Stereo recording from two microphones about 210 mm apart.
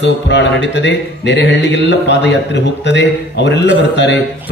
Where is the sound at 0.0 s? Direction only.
60° left (ahead or behind).